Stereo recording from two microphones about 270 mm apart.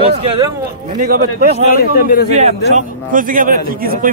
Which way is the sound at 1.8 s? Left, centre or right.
Left.